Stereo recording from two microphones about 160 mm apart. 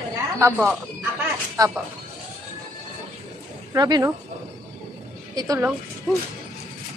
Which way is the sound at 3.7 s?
25° right (ahead or behind).